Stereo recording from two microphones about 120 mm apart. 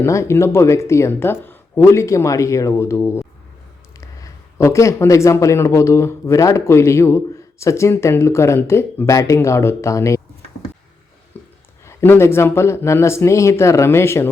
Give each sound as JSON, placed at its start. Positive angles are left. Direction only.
{"t": 0.0, "sound": "speech", "side_deg": 25}
{"t": 11.9, "sound": "speech", "side_deg": 20}